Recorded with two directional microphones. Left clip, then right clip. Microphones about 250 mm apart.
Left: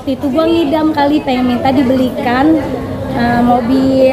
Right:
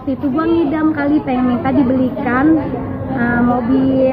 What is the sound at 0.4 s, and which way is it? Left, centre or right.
A woman's voice, centre.